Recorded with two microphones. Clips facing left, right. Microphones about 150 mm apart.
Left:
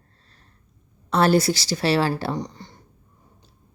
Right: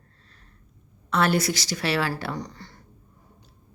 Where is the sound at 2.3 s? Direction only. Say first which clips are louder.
Left 4 dB; 20° left (ahead or behind).